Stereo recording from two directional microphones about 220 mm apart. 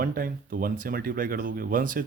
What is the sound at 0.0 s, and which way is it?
Speech, 40° right (ahead or behind).